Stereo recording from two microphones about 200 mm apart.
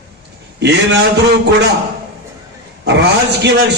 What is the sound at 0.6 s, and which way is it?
Speech, 60° right (ahead or behind).